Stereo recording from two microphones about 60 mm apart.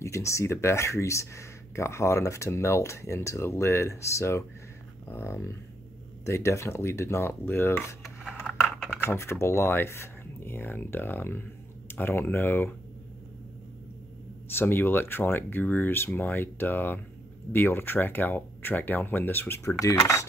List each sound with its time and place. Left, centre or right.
0.0 s speech: left
8.0 s a sound: centre
8.5 s computer keyboard: centre
9.0 s speech: left
14.5 s speech: left
19.8 s speech: left